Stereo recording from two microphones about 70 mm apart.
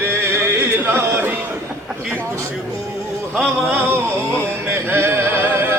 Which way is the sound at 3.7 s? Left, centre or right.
Right.